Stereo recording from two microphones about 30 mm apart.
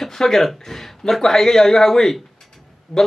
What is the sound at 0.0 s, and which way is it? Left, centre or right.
Speech, centre.